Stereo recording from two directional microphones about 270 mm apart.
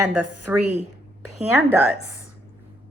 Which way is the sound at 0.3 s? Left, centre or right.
Right.